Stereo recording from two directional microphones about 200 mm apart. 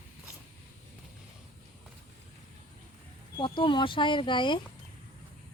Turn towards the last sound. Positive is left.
turn(degrees=25)  # may be behind; listen again after turning